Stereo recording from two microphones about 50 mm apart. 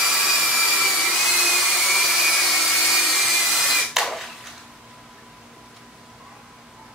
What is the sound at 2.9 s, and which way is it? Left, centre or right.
Tools, centre.